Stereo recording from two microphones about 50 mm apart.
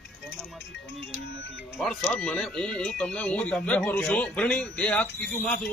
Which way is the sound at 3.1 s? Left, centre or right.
Left.